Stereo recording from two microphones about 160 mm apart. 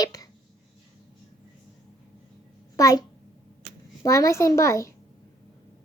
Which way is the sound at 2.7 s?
20° left (ahead or behind).